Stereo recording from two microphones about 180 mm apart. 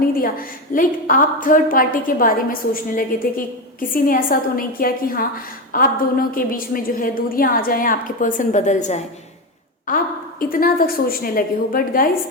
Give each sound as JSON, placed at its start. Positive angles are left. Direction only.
{"t": 0.2, "sound": "a woman's voice", "side_deg": 50}